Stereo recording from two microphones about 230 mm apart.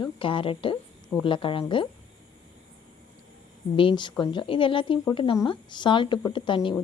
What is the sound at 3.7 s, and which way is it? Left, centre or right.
A woman's voice, left.